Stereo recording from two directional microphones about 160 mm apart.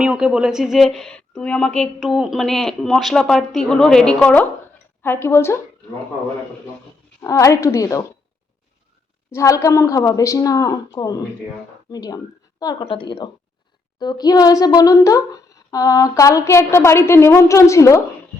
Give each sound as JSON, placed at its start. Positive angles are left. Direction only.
{"t": 0.0, "sound": "a woman's voice", "side_deg": -5}
{"t": 7.2, "sound": "speech", "side_deg": 20}
{"t": 9.3, "sound": "a woman's voice", "side_deg": 20}